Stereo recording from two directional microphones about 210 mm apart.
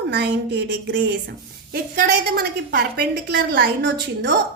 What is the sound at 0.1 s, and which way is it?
A woman's voice, 50° right (ahead or behind).